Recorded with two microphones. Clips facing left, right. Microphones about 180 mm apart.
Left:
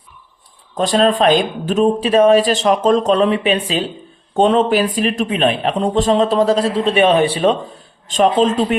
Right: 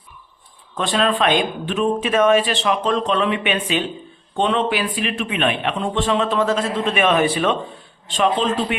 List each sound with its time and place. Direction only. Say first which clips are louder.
0.8 s speech: left 5 dB; 40° left (ahead or behind)